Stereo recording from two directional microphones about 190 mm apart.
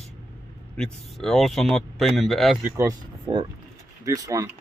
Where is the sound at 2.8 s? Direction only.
20° right (ahead or behind).